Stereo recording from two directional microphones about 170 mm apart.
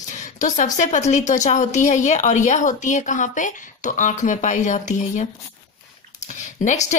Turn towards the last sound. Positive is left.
turn(degrees=45)  # may be behind; listen again after turning